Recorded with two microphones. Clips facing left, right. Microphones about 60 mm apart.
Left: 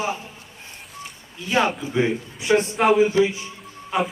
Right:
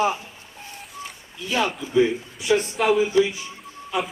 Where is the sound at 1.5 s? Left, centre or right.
Left.